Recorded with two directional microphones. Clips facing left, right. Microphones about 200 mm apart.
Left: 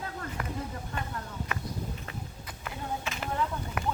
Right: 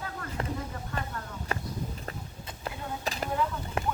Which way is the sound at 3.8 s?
30° right (ahead or behind).